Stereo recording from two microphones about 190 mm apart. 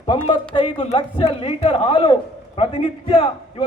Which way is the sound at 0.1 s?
25° left (ahead or behind).